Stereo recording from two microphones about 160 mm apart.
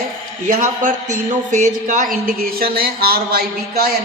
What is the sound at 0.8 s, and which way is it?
A woman's voice, 50° right (ahead or behind).